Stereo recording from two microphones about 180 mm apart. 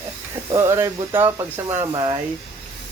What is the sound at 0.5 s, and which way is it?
Speech, 15° right (ahead or behind).